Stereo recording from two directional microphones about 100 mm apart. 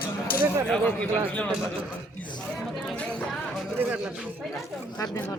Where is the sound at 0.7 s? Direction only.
15° left (ahead or behind).